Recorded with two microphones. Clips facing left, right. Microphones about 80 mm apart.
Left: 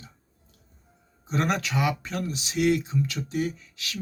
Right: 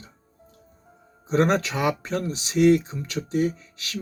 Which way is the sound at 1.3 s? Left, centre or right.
Right.